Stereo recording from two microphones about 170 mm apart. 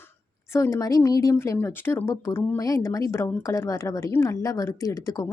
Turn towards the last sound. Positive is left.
turn(degrees=20)  # may be behind; listen again after turning